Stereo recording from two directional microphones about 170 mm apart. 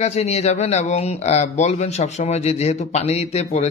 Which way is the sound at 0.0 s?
40° left (ahead or behind).